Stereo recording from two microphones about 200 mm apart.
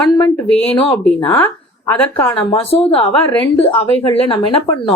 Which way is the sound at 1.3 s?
15° left (ahead or behind).